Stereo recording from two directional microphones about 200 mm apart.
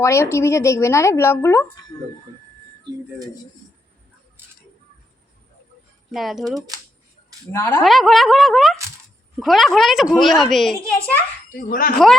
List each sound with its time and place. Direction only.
0.0 s speech: 15° left (ahead or behind)
4.4 s a sound: 10° right (ahead or behind)
6.1 s a child's voice: centre (ahead or behind)
7.5 s speech: 15° left (ahead or behind)
7.9 s a child's voice: centre (ahead or behind)
11.7 s speech: 45° left (ahead or behind)